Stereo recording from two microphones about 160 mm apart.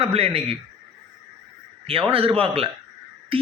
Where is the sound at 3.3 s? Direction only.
35° right (ahead or behind).